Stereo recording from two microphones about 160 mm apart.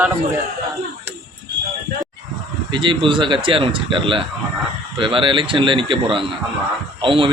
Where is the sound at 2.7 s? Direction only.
30° right (ahead or behind).